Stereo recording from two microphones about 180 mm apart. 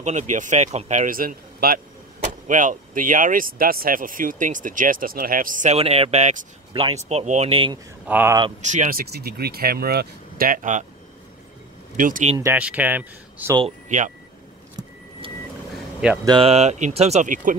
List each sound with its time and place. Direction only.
0.0 s speech: 40° right (ahead or behind)
2.1 s speech: 45° right (ahead or behind)
8.1 s speech: 10° right (ahead or behind)
8.6 s speech: 45° right (ahead or behind)
9.1 s speech: 60° right (ahead or behind); by 10.9 s 45° right (ahead or behind)
12.0 s speech: 45° right (ahead or behind)
12.4 s speech: 10° right (ahead or behind)
13.8 s speech: 45° right (ahead or behind)
16.3 s speech: 30° right (ahead or behind)